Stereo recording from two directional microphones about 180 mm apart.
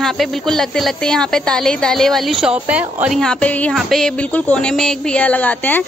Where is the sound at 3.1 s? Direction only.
5° left (ahead or behind).